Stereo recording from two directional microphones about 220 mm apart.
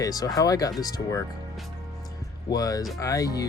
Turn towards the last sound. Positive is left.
turn(degrees=15)  # may be behind; listen again after turning